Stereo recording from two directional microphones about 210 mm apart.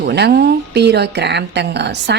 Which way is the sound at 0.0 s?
50° right (ahead or behind).